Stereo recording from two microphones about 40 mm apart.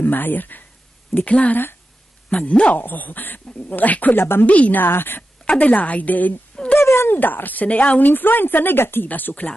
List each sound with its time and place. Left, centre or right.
0.0 s speech: left
1.1 s a woman's voice: left
2.7 s speech: left
4.1 s a woman's voice: left
4.5 s a woman's voice: left
4.8 s speech: left
5.5 s speech: left
6.6 s a sound: centre
7.1 s speech: left
8.1 s speech: left
9.1 s speech: left